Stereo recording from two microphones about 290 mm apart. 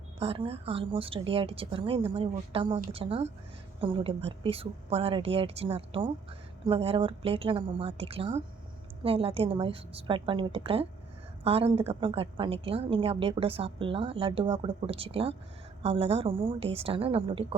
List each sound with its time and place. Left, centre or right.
0.2 s a woman's voice: centre